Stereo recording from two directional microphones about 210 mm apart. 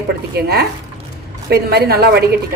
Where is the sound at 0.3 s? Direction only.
50° right (ahead or behind).